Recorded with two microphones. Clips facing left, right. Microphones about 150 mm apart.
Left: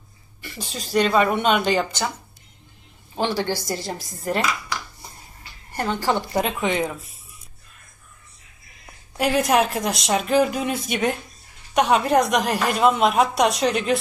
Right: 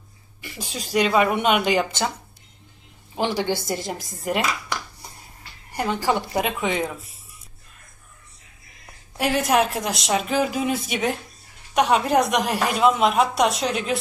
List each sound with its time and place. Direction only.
0.4 s a woman's voice: 10° right (ahead or behind)
1.9 s speech: 20° right (ahead or behind)
3.2 s a woman's voice: 15° right (ahead or behind)
5.7 s a woman's voice: 10° right (ahead or behind)
9.1 s a woman's voice: centre (ahead or behind)